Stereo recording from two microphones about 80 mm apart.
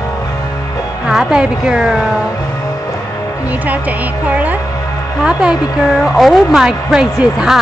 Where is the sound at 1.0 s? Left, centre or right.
Centre.